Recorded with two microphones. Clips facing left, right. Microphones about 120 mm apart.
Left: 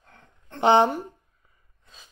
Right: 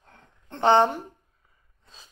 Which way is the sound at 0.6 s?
15° left (ahead or behind).